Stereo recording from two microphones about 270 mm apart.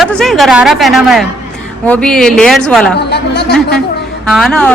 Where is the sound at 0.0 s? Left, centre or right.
Centre.